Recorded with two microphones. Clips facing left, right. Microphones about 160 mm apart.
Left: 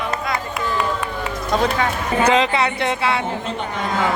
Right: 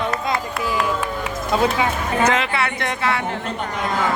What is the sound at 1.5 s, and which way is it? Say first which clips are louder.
Speech: even; 5° right (ahead or behind).